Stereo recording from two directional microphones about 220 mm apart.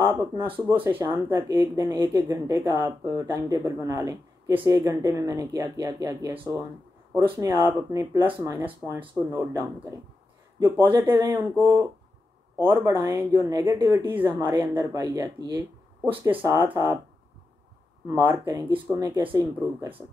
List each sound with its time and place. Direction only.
0.0 s speech: 10° right (ahead or behind)
18.0 s speech: 10° right (ahead or behind)